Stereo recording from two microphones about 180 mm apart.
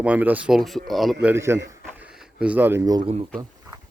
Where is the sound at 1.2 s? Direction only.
15° right (ahead or behind).